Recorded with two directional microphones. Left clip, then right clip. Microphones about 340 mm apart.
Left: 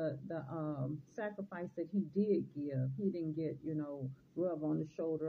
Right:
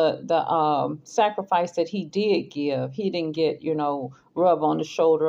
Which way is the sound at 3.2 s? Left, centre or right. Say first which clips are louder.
Right 17 dB; right.